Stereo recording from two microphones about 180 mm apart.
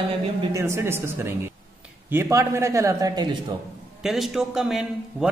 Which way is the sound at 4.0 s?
Centre (ahead or behind).